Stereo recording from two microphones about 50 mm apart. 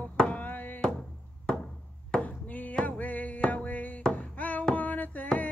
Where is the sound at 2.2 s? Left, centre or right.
Left.